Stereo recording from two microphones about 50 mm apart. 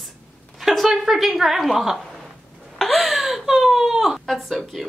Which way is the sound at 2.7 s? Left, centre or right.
Centre.